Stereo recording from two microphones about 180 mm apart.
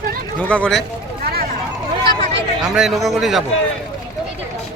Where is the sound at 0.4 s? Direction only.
5° left (ahead or behind).